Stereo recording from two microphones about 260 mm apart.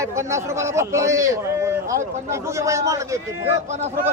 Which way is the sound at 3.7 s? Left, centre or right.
Right.